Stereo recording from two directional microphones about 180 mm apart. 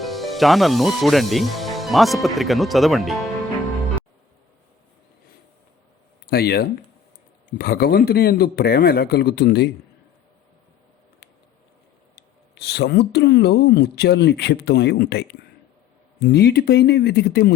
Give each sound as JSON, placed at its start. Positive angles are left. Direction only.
{"t": 0.0, "sound": "speech", "side_deg": 0}
{"t": 6.2, "sound": "speech", "side_deg": 60}
{"t": 12.1, "sound": "speech", "side_deg": 65}